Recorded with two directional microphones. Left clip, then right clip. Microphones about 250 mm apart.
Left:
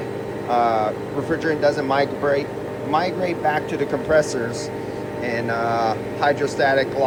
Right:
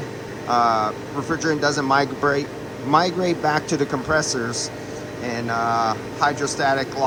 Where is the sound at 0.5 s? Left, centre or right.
Centre.